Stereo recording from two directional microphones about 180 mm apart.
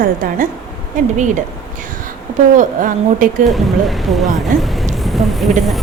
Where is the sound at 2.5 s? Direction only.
50° right (ahead or behind).